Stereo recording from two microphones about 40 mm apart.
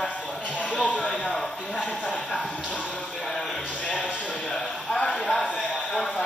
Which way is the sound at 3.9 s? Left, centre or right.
Left.